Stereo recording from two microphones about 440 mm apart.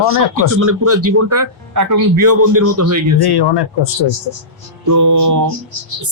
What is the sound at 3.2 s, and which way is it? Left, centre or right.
Speech, left.